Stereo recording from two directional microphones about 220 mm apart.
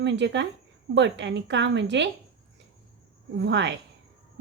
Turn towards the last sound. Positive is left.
turn(degrees=-55)  # may be behind; listen again after turning